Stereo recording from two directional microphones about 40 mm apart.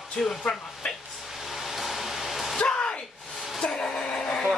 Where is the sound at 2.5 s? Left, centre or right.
Left.